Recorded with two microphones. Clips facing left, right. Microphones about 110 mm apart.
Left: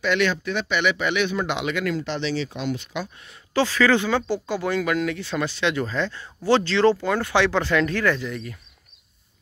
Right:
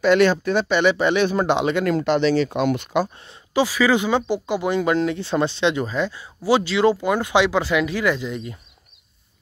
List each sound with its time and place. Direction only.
0.0 s speech: 35° right (ahead or behind)
2.0 s speech: 50° right (ahead or behind)
3.5 s speech: 10° right (ahead or behind)